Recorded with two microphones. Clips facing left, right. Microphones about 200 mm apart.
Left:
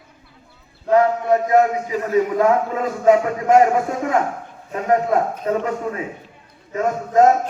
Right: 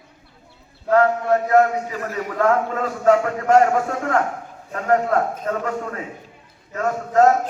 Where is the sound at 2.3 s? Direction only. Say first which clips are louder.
Left 2 dB; 15° left (ahead or behind).